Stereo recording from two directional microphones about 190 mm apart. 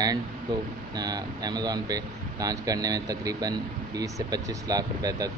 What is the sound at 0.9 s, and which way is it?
Speech, 20° right (ahead or behind).